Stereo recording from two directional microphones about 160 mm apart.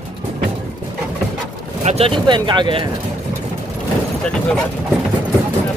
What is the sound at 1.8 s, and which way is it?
Speech, 45° right (ahead or behind).